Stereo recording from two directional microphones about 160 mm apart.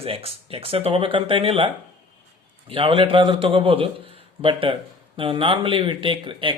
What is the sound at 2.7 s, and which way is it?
Speech, 35° right (ahead or behind).